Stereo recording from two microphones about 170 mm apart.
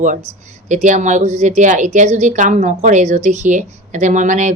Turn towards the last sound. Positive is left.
turn(degrees=-45)  # may be behind; listen again after turning